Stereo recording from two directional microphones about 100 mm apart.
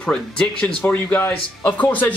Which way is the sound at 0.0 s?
10° left (ahead or behind).